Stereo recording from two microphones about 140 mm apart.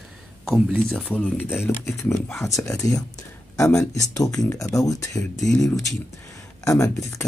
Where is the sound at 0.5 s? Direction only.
Centre (ahead or behind).